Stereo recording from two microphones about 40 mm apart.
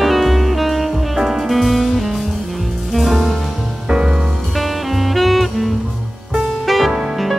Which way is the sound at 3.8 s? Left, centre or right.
Right.